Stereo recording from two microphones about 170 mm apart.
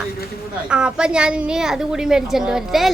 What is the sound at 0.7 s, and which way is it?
A woman's voice, 5° right (ahead or behind).